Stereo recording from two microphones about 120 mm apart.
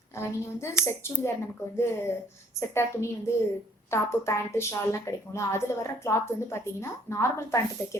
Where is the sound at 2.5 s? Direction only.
20° left (ahead or behind).